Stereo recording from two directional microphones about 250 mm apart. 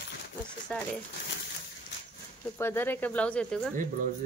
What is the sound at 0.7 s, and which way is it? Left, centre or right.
Speech, centre.